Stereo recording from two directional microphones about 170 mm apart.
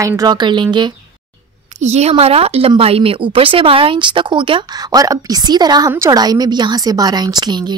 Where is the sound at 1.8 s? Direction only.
40° right (ahead or behind).